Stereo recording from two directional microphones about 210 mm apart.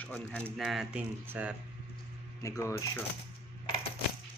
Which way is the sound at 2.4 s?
15° left (ahead or behind).